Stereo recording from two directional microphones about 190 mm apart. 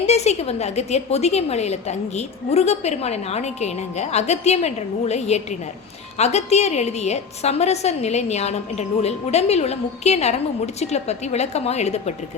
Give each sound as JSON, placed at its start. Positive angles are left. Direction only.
{"t": 0.0, "sound": "a woman's voice", "side_deg": 35}